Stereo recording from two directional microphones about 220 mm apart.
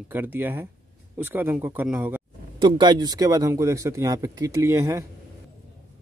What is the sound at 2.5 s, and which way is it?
Speech, 20° right (ahead or behind).